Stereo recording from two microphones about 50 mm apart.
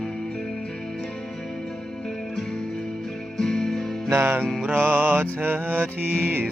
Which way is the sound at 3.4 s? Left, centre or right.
Centre.